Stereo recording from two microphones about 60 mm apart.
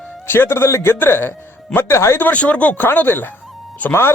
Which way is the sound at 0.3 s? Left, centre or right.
Left.